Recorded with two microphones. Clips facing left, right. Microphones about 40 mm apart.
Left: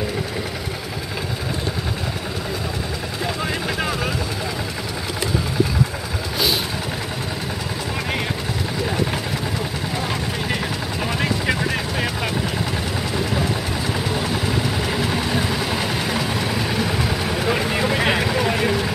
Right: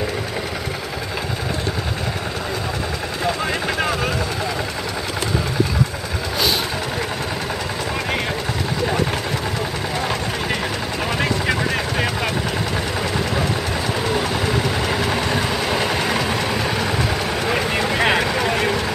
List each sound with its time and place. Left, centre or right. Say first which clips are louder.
3.7 s vehicle: right 2 dB; centre
11.1 s vehicle: right 1 dB; centre
14.3 s vehicle: right 2 dB; centre